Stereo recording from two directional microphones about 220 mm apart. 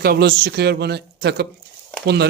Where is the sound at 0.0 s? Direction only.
45° right (ahead or behind).